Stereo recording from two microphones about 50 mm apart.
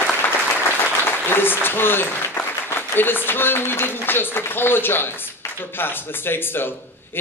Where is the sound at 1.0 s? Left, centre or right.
Left.